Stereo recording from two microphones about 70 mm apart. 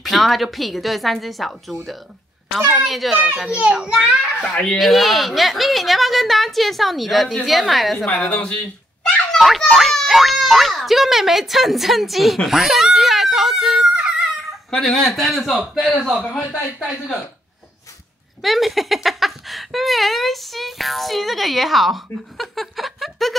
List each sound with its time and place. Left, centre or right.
0.0 s a child's voice: centre
3.5 s a child's voice: centre
8.1 s speech: centre
9.0 s speech: centre
13.9 s a sound: centre
14.7 s speech: centre
18.4 s speech: centre